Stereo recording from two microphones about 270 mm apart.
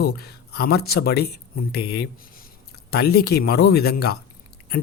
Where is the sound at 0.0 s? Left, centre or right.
Left.